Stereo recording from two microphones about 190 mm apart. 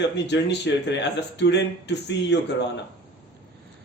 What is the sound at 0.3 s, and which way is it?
Speech, 65° left (ahead or behind).